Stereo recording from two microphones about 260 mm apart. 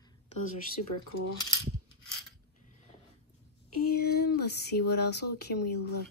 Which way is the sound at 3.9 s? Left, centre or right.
Left.